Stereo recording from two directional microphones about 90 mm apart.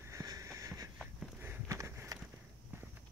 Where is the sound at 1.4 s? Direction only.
25° right (ahead or behind).